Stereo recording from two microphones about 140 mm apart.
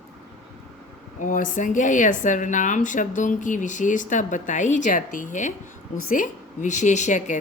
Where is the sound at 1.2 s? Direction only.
70° left (ahead or behind).